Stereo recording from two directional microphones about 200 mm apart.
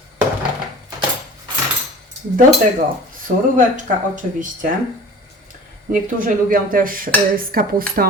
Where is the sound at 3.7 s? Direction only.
40° right (ahead or behind).